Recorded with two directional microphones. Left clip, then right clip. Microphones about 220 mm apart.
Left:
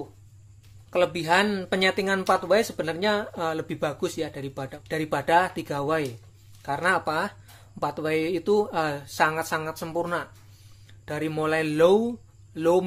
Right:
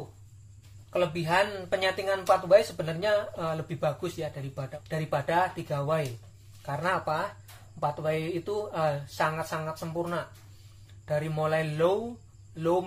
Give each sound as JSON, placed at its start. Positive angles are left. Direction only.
{"t": 0.8, "sound": "speech", "side_deg": 50}